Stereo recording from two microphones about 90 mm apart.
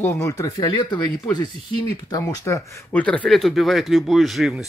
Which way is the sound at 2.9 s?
15° left (ahead or behind).